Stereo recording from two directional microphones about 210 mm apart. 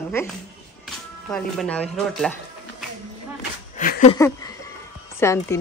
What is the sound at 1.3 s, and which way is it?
Speech, 5° left (ahead or behind).